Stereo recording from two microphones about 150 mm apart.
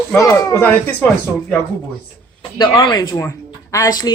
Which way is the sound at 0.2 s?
20° left (ahead or behind).